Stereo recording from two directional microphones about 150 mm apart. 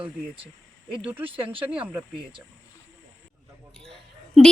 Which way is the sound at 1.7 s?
10° right (ahead or behind).